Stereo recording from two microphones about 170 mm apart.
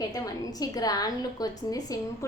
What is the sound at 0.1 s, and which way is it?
A woman's voice, 20° left (ahead or behind).